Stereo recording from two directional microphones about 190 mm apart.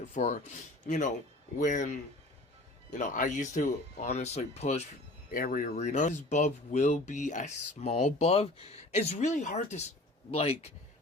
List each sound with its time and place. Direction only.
0.1 s speech: 35° left (ahead or behind)
5.3 s speech: 45° left (ahead or behind); by 10.7 s 30° left (ahead or behind)